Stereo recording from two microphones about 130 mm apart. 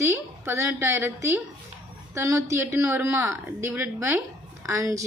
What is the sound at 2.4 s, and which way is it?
A woman's voice, 20° right (ahead or behind).